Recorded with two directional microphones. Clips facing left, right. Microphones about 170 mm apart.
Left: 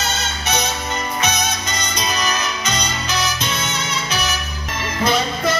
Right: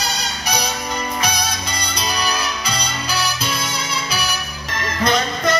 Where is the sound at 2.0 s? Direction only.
10° right (ahead or behind).